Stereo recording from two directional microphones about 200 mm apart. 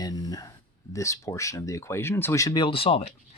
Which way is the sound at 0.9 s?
15° left (ahead or behind).